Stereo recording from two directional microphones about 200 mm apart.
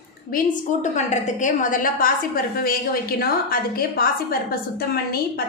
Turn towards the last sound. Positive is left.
turn(degrees=50)  # may be behind; listen again after turning